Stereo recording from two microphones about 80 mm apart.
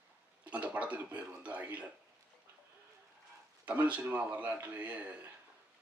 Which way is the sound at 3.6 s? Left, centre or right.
Centre.